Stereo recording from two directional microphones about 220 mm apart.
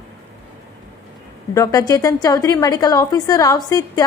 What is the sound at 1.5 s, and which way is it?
A woman's voice, 15° left (ahead or behind).